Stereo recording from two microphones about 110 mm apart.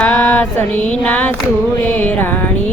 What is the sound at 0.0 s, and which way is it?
Female singing, 15° left (ahead or behind).